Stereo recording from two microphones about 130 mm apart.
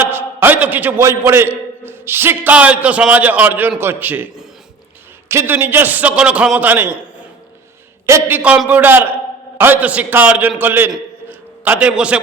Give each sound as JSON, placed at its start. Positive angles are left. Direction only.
{"t": 0.0, "sound": "a man's voice", "side_deg": -15}
{"t": 8.0, "sound": "a man's voice", "side_deg": -20}
{"t": 8.4, "sound": "a man's voice", "side_deg": -10}
{"t": 11.3, "sound": "a sound", "side_deg": -15}